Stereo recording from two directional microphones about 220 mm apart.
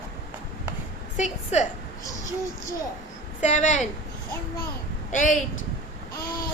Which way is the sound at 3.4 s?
35° left (ahead or behind).